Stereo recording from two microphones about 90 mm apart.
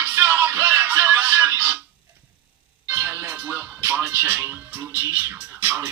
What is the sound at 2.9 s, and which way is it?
Music, 20° right (ahead or behind).